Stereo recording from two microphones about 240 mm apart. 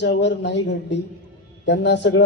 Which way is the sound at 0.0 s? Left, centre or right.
Left.